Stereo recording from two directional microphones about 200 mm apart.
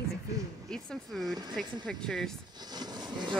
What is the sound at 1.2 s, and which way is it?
Speech, 20° right (ahead or behind).